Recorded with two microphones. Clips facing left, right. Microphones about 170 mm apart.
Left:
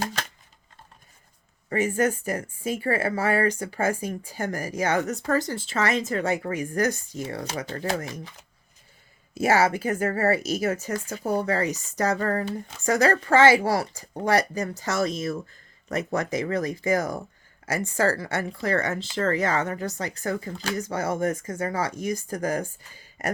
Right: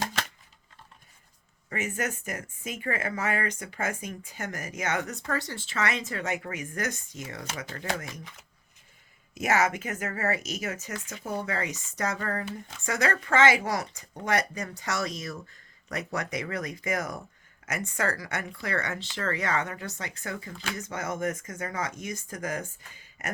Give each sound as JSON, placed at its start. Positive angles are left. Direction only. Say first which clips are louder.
{"t": 1.7, "sound": "speech", "louder": "left 9 dB", "side_deg": 35}